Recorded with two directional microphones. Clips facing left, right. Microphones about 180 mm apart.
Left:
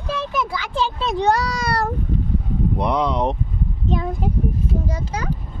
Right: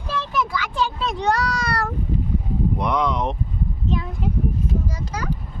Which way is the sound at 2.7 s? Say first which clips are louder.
Left 3 dB; 30° left (ahead or behind).